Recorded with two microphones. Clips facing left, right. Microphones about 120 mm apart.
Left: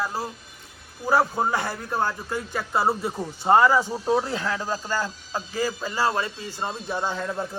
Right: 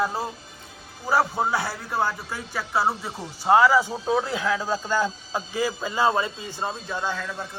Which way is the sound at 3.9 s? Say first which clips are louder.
Left 1 dB; 5° left (ahead or behind).